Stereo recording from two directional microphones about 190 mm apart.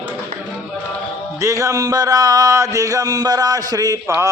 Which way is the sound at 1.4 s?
15° right (ahead or behind).